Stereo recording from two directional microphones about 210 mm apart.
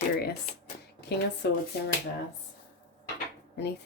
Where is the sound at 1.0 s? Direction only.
50° left (ahead or behind).